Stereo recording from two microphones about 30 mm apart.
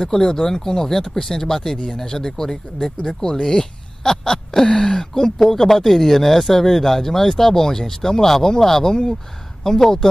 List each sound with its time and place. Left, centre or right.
0.0 s speech: centre